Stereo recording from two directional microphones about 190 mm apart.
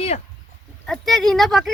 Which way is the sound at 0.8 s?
Centre (ahead or behind).